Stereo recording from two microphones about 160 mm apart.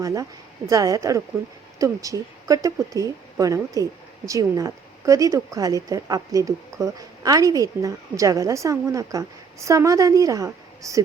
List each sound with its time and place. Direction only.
0.0 s speech: 20° right (ahead or behind)